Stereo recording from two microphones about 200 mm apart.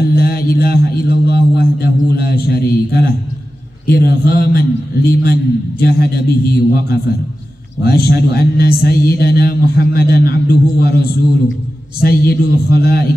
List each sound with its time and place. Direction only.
0.0 s a sound: 50° left (ahead or behind)
3.8 s a man's voice: 50° left (ahead or behind)
12.0 s a man's voice: 50° left (ahead or behind)